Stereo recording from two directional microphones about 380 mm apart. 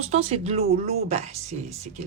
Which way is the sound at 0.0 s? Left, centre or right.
Centre.